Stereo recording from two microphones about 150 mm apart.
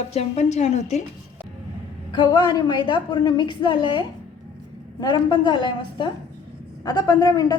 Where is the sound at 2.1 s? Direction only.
30° left (ahead or behind).